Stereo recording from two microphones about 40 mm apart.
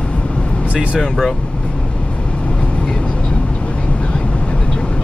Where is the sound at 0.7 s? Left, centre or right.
Right.